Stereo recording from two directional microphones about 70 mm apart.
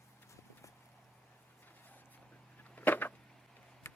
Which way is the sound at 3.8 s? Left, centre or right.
Left.